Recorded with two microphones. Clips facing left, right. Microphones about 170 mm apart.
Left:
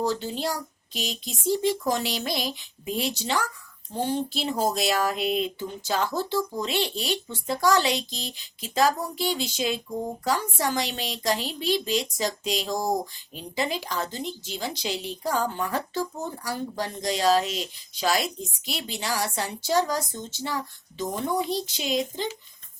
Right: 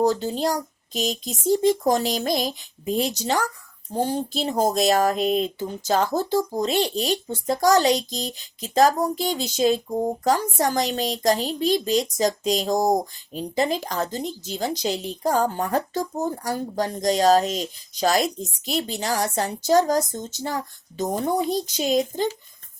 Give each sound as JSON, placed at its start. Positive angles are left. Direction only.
{"t": 0.0, "sound": "speech", "side_deg": -45}